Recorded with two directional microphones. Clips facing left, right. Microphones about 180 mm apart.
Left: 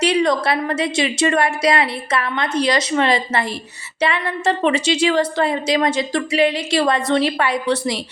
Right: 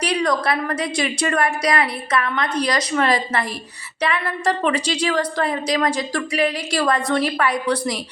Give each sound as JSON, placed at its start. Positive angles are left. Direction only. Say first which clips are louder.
{"t": 0.0, "sound": "a woman's voice", "louder": "left 3 dB", "side_deg": 25}